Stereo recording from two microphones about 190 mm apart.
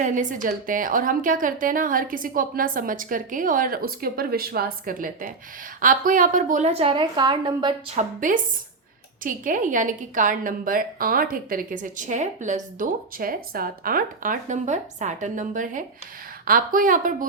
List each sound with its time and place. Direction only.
0.0 s a woman's voice: 40° right (ahead or behind); by 7.7 s 25° right (ahead or behind)
7.9 s a woman's voice: 45° right (ahead or behind)